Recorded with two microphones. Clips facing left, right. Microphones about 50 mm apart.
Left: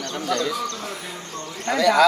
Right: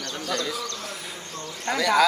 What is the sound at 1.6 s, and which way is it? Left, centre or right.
Speech, centre.